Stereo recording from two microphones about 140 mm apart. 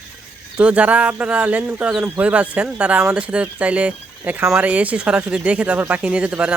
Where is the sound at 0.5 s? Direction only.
10° right (ahead or behind).